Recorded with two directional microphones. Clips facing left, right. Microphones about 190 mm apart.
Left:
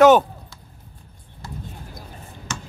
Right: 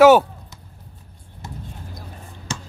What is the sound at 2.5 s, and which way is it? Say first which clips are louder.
Finger snapping: right 2 dB; 30° right (ahead or behind).